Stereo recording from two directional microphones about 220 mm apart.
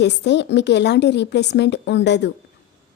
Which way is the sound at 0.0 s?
50° left (ahead or behind).